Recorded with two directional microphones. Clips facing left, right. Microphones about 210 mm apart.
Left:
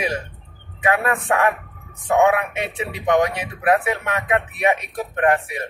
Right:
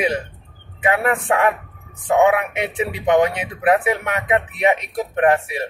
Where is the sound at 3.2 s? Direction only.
20° right (ahead or behind).